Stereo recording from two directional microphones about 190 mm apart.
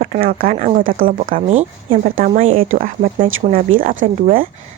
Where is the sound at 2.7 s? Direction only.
45° right (ahead or behind).